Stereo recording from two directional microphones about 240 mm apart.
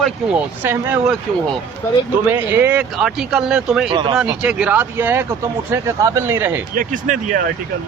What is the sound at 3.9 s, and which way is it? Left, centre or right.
Speech, centre.